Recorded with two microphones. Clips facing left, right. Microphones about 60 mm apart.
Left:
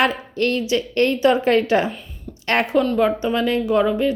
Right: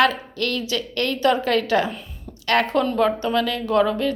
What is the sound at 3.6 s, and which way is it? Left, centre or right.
Speech, centre.